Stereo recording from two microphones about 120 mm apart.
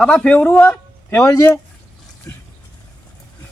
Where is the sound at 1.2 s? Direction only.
25° left (ahead or behind).